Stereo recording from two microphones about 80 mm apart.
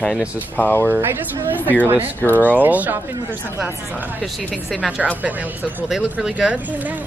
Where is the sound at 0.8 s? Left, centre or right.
Right.